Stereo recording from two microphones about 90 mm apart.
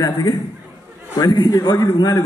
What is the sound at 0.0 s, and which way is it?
A man's voice, 45° left (ahead or behind).